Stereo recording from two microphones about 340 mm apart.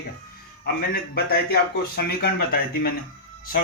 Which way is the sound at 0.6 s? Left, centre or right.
Left.